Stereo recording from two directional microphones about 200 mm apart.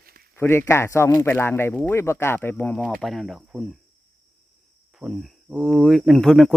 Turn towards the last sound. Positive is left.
turn(degrees=0)  # may be behind; listen again after turning